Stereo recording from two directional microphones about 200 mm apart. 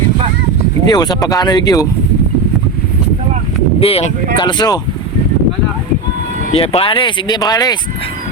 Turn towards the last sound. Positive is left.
turn(degrees=20)  # may be behind; listen again after turning